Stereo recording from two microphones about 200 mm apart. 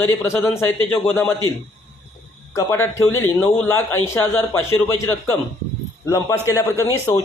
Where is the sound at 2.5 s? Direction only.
15° left (ahead or behind).